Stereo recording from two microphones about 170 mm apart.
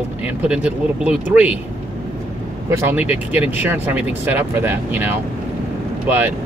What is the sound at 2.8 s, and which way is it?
Speech, 10° right (ahead or behind).